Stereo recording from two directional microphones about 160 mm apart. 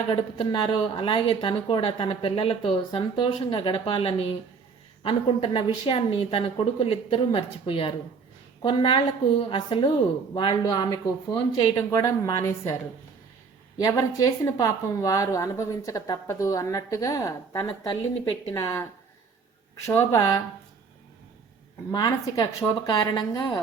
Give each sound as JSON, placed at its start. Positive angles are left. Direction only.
{"t": 0.1, "sound": "speech", "side_deg": 30}
{"t": 13.7, "sound": "speech", "side_deg": 20}
{"t": 19.9, "sound": "speech", "side_deg": 15}
{"t": 21.9, "sound": "speech", "side_deg": 25}